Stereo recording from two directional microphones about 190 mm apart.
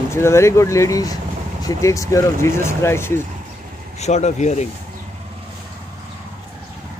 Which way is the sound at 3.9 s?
35° left (ahead or behind).